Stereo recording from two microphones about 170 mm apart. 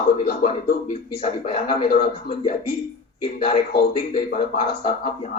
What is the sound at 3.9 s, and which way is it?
Speech, 35° left (ahead or behind).